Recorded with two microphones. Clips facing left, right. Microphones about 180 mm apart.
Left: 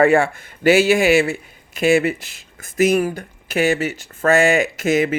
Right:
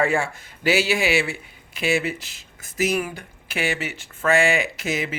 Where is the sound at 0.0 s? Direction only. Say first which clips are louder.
Left 8 dB; 60° left (ahead or behind).